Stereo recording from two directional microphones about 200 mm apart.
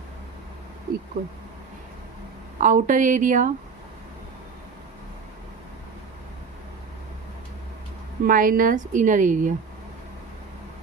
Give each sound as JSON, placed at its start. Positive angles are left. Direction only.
{"t": 0.9, "sound": "speech", "side_deg": -50}
{"t": 2.6, "sound": "a woman's voice", "side_deg": -40}
{"t": 8.2, "sound": "a woman's voice", "side_deg": -45}